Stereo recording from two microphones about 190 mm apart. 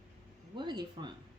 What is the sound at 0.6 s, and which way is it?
Speech, 25° right (ahead or behind).